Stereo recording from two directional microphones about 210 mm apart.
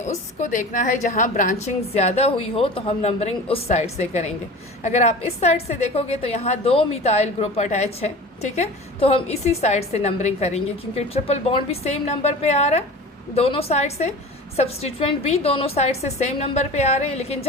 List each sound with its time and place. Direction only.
0.1 s a woman's voice: 35° left (ahead or behind)